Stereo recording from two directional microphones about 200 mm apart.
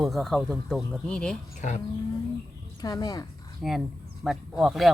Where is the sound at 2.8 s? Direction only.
20° left (ahead or behind).